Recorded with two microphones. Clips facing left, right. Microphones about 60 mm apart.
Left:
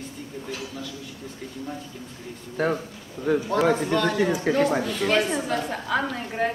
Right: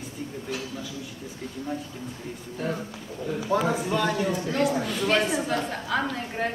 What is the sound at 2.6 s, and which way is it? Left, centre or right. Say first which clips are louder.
Speech: left 6 dB; left.